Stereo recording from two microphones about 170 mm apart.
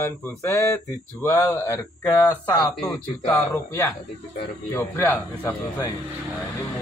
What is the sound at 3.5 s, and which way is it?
Speech, 20° left (ahead or behind).